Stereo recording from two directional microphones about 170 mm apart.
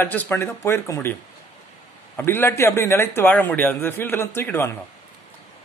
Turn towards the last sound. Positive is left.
turn(degrees=15)  # may be behind; listen again after turning